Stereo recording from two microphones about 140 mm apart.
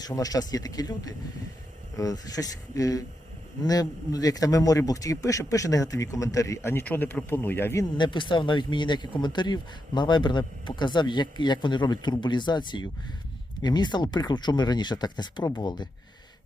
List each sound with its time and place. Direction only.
0.0 s a man's voice: 25° left (ahead or behind)
7.9 s speech: 35° left (ahead or behind)